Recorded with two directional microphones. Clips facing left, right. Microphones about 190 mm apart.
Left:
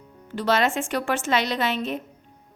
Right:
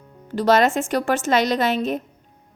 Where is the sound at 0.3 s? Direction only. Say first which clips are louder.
Right 5 dB; 40° right (ahead or behind).